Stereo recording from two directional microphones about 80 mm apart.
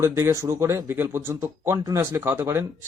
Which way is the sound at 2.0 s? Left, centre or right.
Right.